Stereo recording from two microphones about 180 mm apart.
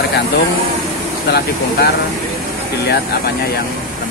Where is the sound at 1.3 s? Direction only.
60° left (ahead or behind).